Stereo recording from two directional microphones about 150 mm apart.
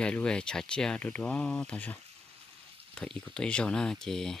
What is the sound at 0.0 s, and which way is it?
Speech, 5° left (ahead or behind).